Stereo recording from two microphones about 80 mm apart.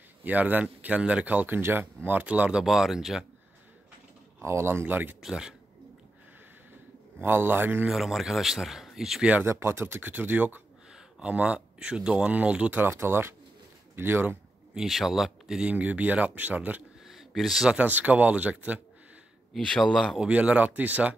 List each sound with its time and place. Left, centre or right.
0.2 s speech: right
2.6 s speech: centre
4.4 s speech: right
5.2 s speech: centre
7.2 s speech: right
7.9 s speech: centre
9.3 s speech: right
10.9 s speech: centre; by 14.4 s right
14.7 s speech: centre
15.7 s speech: centre
17.0 s a sound: centre
17.6 s speech: centre
19.5 s speech: centre
20.2 s speech: centre